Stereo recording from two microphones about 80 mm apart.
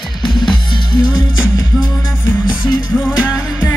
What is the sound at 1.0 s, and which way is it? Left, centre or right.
Music, left.